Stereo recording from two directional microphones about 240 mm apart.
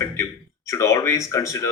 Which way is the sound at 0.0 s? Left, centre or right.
Centre.